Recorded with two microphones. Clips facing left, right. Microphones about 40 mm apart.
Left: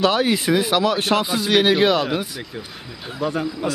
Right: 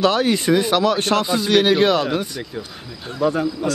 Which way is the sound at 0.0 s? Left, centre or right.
Centre.